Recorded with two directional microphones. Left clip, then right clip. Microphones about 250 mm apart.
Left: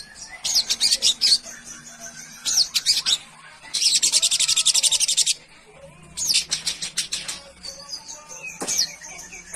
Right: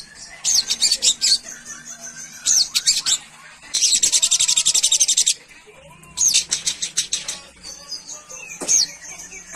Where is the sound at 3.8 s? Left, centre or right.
Centre.